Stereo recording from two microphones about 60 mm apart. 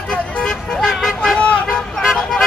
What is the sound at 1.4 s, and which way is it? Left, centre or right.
Vehicle, centre.